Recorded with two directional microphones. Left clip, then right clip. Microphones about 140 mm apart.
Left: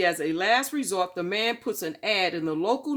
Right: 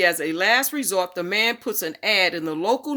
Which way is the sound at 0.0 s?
20° right (ahead or behind).